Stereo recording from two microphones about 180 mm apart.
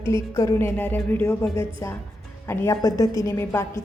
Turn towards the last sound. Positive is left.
turn(degrees=15)  # may be behind; listen again after turning